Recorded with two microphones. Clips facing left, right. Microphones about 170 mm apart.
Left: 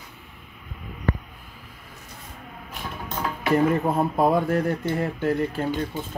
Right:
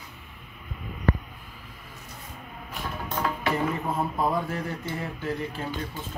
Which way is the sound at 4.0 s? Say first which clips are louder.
Left 4 dB; 45° left (ahead or behind).